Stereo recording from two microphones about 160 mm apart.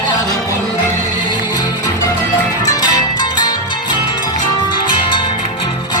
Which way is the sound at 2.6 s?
25° left (ahead or behind).